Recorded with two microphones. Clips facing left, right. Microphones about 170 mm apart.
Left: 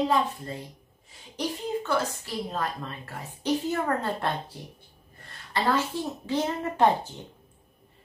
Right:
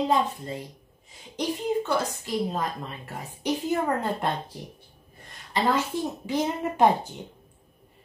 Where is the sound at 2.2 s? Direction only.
15° right (ahead or behind).